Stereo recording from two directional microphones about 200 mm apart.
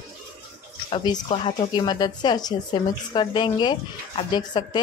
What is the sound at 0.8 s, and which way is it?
A woman's voice, 25° left (ahead or behind).